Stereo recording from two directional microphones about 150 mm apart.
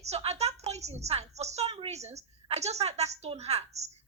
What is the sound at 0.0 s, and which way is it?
A woman's voice, 45° right (ahead or behind).